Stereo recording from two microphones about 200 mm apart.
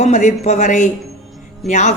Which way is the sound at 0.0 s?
35° left (ahead or behind).